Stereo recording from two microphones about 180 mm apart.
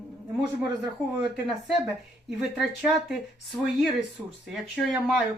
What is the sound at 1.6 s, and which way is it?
A woman's voice, centre (ahead or behind).